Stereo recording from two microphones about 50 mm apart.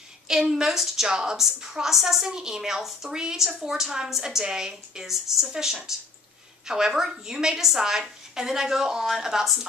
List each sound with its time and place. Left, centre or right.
0.3 s a woman's voice: centre